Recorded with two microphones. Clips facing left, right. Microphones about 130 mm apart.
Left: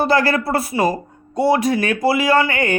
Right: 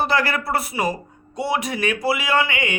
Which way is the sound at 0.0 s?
35° left (ahead or behind).